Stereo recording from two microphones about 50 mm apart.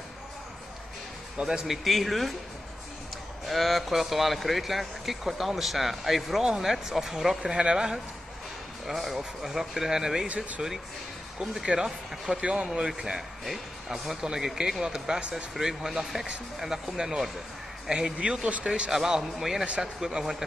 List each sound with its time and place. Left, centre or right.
1.4 s speech: centre
1.9 s speech: centre
3.4 s speech: centre
9.1 s speech: centre
10.2 s speech: right
11.3 s speech: centre
13.5 s speech: centre
18.9 s speech: centre